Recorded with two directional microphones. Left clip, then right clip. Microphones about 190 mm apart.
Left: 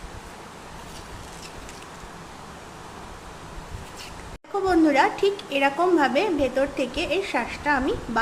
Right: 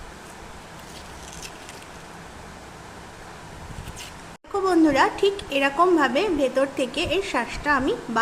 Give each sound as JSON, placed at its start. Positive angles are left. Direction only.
{"t": 4.6, "sound": "a woman's voice", "side_deg": -10}